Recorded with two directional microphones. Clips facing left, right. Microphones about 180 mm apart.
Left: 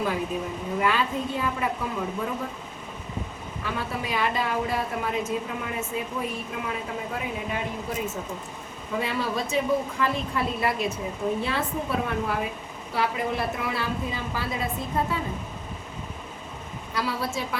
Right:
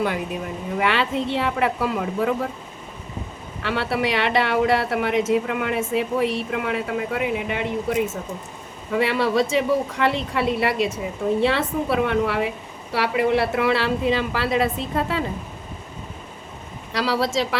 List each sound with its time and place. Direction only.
0.8 s speech: 80° right
3.6 s a woman's voice: 80° right
16.9 s speech: 80° right